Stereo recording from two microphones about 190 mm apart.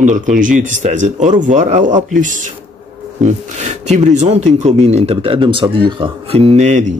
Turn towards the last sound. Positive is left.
turn(degrees=-35)  # may be behind; listen again after turning